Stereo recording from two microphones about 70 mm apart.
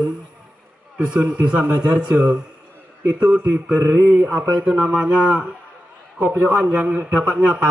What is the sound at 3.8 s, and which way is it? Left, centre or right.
Mantra, right.